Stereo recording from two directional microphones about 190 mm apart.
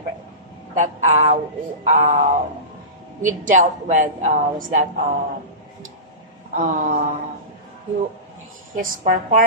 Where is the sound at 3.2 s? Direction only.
40° right (ahead or behind).